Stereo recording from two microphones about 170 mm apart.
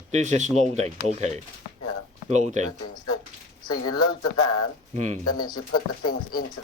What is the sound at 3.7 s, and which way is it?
Speech, 25° left (ahead or behind).